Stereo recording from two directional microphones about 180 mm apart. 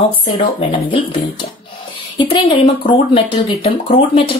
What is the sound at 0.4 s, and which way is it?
A woman's voice, 30° left (ahead or behind).